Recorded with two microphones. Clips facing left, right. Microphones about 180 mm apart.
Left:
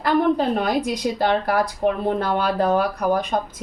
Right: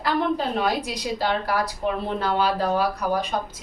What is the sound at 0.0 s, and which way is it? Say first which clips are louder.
A woman's voice: left 5 dB; 50° left (ahead or behind).